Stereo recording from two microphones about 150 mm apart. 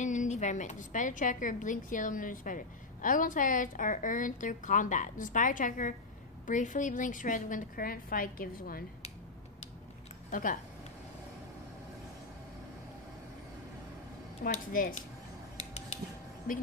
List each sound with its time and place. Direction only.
0.0 s a woman's voice: 55° left (ahead or behind); by 8.8 s 75° left (ahead or behind)
10.3 s a woman's voice: 60° left (ahead or behind)
14.7 s a woman's voice: 65° left (ahead or behind)
16.5 s a woman's voice: 65° left (ahead or behind)